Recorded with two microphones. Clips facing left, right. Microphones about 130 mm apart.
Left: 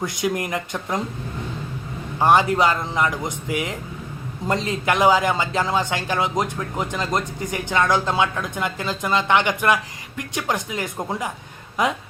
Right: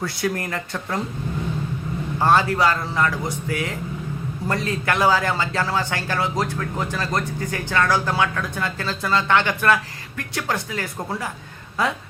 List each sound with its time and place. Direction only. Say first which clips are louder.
0.0 s a man's voice: left 1 dB; 20° left (ahead or behind)
2.1 s a man's voice: left 2 dB; 15° left (ahead or behind)